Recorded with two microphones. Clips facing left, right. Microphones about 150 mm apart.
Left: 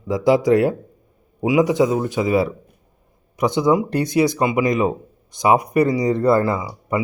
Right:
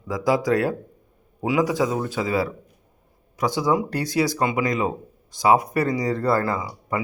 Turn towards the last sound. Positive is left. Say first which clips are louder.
# left 4 dB
turn(degrees=15)  # may be behind; listen again after turning